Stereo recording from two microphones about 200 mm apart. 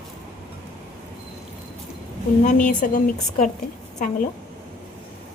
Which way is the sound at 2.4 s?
40° left (ahead or behind).